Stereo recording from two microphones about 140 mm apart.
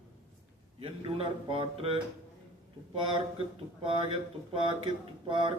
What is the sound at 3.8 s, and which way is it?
Speech, 35° right (ahead or behind).